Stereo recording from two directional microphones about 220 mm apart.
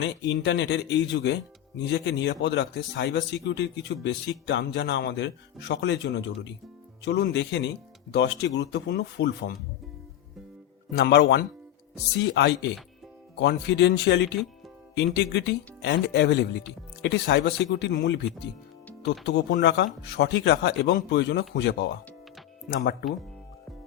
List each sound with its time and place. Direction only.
0.0 s speech: 55° left (ahead or behind)
10.9 s speech: 50° left (ahead or behind)